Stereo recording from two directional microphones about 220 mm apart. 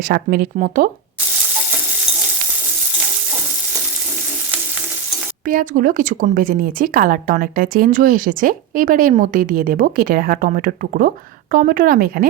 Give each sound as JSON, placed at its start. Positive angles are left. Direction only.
{"t": 0.0, "sound": "speech", "side_deg": -45}
{"t": 5.5, "sound": "speech", "side_deg": -40}